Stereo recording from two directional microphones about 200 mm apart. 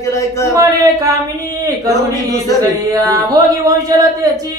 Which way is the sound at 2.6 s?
20° right (ahead or behind).